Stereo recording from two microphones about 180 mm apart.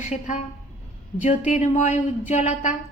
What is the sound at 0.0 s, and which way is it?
Speech, 40° left (ahead or behind).